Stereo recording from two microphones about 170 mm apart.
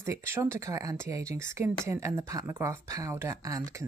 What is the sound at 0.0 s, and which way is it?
A woman's voice, 15° right (ahead or behind).